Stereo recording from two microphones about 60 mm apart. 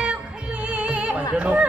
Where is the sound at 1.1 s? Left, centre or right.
Centre.